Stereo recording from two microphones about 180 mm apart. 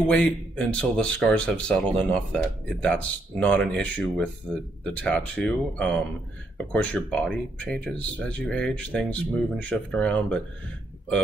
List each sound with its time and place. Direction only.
0.1 s speech: 5° left (ahead or behind)